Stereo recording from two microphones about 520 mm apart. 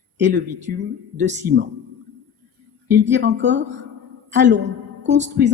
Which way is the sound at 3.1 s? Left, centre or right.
Centre.